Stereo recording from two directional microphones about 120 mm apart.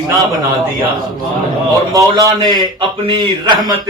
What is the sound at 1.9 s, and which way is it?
A man's voice, 30° right (ahead or behind).